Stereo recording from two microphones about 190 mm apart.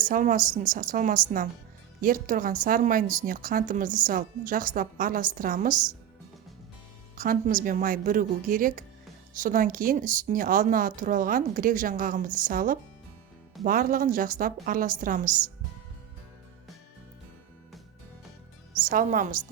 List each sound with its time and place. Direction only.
0.0 s speech: 45° right (ahead or behind)
7.2 s speech: 45° right (ahead or behind)
18.9 s speech: 45° right (ahead or behind)